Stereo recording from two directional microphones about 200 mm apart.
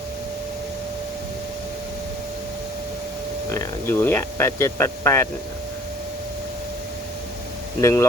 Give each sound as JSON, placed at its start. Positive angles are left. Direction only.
{"t": 3.5, "sound": "speech", "side_deg": 15}
{"t": 7.8, "sound": "speech", "side_deg": 15}